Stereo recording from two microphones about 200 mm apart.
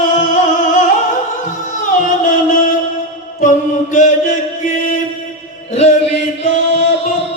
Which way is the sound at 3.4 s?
40° left (ahead or behind).